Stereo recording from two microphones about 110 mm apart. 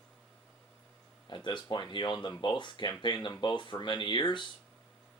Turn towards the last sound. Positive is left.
turn(degrees=45)  # may be behind; listen again after turning